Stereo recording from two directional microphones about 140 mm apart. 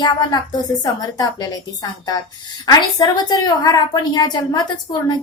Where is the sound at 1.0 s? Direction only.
25° left (ahead or behind).